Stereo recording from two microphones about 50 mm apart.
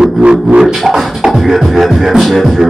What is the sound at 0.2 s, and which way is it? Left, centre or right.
Music, right.